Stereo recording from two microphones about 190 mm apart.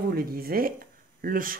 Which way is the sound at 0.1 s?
50° right (ahead or behind).